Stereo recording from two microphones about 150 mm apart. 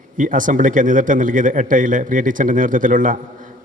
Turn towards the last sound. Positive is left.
turn(degrees=-65)  # may be behind; listen again after turning